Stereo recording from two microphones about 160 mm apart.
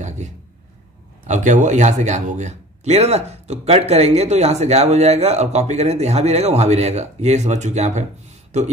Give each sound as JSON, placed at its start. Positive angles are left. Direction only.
{"t": 1.2, "sound": "speech", "side_deg": -50}